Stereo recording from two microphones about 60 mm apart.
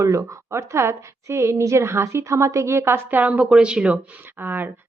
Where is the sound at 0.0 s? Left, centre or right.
Right.